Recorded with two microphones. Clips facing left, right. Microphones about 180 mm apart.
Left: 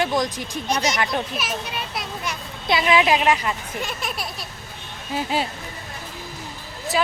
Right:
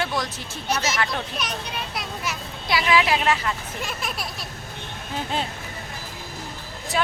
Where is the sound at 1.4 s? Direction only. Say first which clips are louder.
Left 2 dB; 5° left (ahead or behind).